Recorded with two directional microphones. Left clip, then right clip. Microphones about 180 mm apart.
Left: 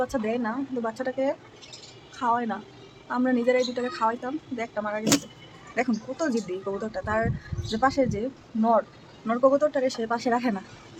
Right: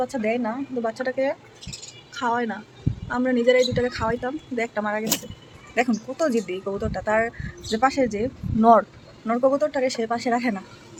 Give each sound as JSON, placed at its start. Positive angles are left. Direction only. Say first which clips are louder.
{"t": 0.0, "sound": "a woman's voice", "louder": "right 3 dB", "side_deg": 0}
{"t": 6.1, "sound": "speech", "louder": "right 6 dB", "side_deg": -5}
{"t": 8.6, "sound": "speech", "louder": "right 7 dB", "side_deg": -25}
{"t": 9.2, "sound": "speech", "louder": "right 1 dB", "side_deg": -5}